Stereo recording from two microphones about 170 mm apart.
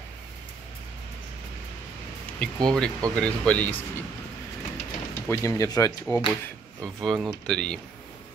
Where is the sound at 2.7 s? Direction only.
5° left (ahead or behind).